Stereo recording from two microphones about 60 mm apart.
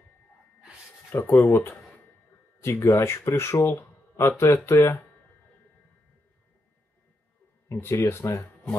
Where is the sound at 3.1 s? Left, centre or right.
Left.